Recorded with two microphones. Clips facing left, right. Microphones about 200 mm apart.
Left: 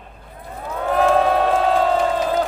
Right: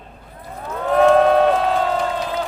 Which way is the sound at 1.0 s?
5° left (ahead or behind).